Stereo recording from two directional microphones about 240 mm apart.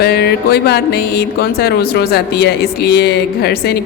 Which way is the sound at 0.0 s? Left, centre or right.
Left.